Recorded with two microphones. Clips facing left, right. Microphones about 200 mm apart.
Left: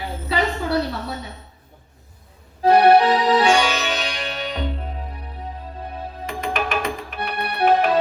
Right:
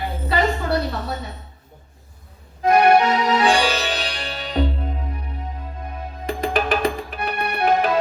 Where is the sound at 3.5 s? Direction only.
35° right (ahead or behind).